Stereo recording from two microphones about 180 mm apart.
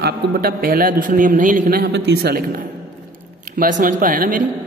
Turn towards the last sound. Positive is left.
turn(degrees=-50)  # may be behind; listen again after turning